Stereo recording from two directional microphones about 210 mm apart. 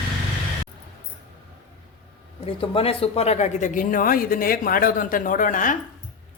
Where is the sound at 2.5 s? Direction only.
25° left (ahead or behind).